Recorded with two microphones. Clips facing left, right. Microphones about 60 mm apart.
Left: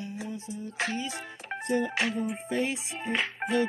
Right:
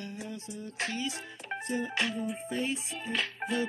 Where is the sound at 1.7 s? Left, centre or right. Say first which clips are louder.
Left 5 dB; left.